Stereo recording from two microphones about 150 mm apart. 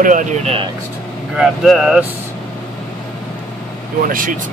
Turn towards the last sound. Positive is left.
turn(degrees=-65)  # may be behind; listen again after turning